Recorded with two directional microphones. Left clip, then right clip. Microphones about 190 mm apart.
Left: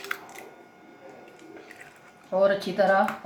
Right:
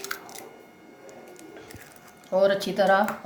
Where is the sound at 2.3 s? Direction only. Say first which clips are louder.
Right 1 dB; centre (ahead or behind).